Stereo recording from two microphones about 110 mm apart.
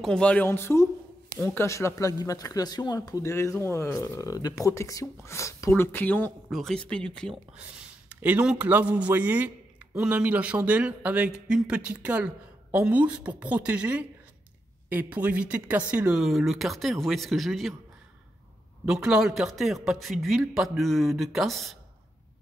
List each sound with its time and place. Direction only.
0.0 s speech: 10° left (ahead or behind)
0.5 s speech: 25° left (ahead or behind)
6.5 s speech: 5° left (ahead or behind)
8.1 s speech: 15° right (ahead or behind)
15.1 s a man's voice: 15° right (ahead or behind)
18.9 s a man's voice: 5° right (ahead or behind)